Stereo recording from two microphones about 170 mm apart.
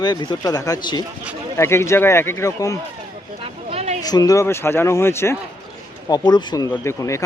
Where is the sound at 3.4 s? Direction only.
35° right (ahead or behind).